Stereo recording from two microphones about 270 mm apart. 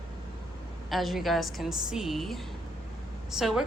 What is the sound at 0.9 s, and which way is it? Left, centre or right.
A woman's voice, centre.